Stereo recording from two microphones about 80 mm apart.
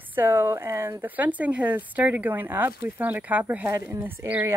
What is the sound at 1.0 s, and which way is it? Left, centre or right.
Speech, right.